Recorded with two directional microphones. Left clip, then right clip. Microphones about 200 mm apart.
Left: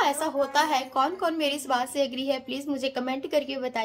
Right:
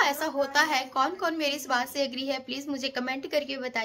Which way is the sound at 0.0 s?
5° left (ahead or behind).